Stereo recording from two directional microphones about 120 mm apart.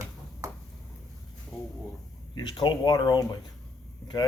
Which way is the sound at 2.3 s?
40° left (ahead or behind).